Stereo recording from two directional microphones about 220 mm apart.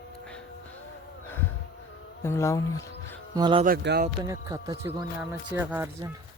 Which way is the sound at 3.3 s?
20° right (ahead or behind).